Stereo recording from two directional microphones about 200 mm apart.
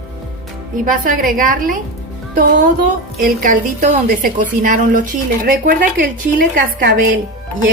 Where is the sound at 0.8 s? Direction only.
45° right (ahead or behind).